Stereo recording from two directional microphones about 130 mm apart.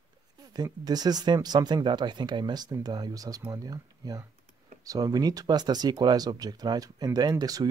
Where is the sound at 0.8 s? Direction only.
30° right (ahead or behind).